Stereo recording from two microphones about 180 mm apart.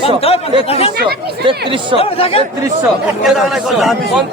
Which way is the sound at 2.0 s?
35° left (ahead or behind).